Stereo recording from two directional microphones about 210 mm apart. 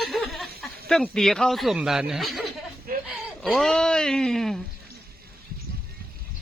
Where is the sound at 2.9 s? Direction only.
45° right (ahead or behind).